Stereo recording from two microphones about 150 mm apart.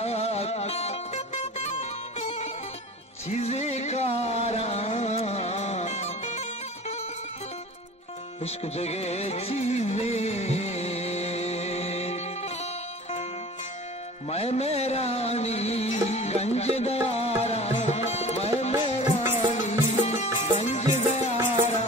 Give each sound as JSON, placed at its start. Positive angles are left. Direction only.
{"t": 0.0, "sound": "music", "side_deg": 45}
{"t": 8.5, "sound": "music", "side_deg": 45}
{"t": 14.3, "sound": "music", "side_deg": 45}